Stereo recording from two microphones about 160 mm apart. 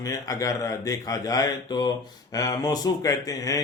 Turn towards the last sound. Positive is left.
turn(degrees=20)  # may be behind; listen again after turning